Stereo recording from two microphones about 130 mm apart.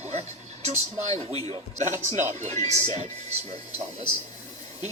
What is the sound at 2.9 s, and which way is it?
Speech, 55° right (ahead or behind).